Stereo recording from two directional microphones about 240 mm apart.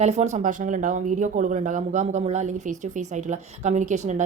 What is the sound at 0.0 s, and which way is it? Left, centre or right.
A woman's voice, right.